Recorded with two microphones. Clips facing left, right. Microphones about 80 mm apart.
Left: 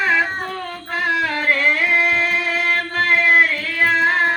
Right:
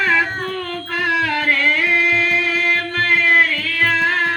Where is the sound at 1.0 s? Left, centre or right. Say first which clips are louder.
Right 1 dB; left.